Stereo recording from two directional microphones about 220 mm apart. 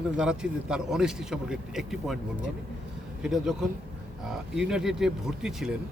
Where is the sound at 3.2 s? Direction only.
Centre (ahead or behind).